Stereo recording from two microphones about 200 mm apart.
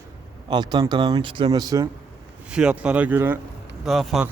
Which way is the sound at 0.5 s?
20° right (ahead or behind).